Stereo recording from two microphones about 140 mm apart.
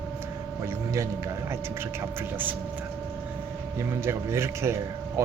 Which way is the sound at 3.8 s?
20° right (ahead or behind).